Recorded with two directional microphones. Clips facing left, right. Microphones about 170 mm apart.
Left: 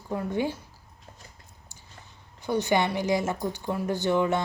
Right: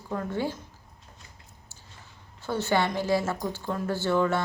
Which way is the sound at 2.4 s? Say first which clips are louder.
Left 1 dB; 15° left (ahead or behind).